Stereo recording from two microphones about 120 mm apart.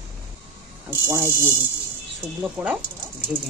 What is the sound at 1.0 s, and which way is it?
Insect, 20° right (ahead or behind).